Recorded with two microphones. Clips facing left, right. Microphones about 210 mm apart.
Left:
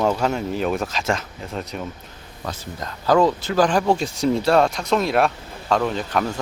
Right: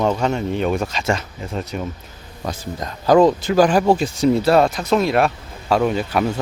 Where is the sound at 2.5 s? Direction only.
15° right (ahead or behind).